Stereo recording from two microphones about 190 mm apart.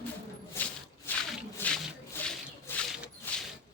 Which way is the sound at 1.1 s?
10° left (ahead or behind).